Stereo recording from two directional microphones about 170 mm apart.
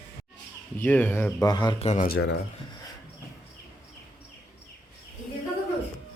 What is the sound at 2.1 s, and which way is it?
Speech, 75° left (ahead or behind).